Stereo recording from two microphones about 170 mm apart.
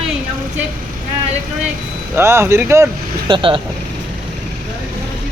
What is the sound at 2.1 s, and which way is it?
Speech, 15° right (ahead or behind).